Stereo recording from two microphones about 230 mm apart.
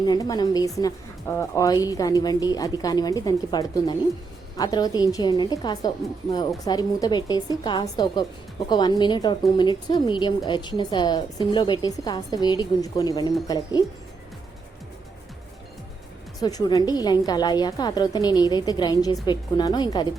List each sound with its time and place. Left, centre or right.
0.0 s a woman's voice: centre
16.4 s a woman's voice: centre